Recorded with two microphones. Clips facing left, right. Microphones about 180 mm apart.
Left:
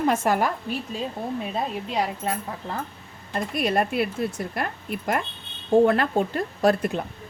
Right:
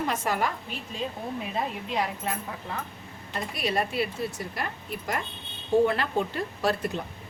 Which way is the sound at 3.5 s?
50° left (ahead or behind).